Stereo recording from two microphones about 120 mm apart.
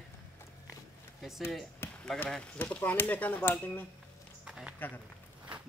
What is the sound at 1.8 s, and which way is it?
Basketball bounce, 20° left (ahead or behind).